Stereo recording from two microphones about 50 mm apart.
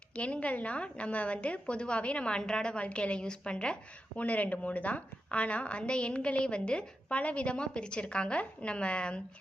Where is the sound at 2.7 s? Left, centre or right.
Left.